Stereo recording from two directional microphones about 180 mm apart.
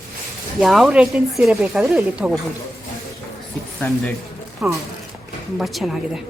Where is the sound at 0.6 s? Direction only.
Centre (ahead or behind).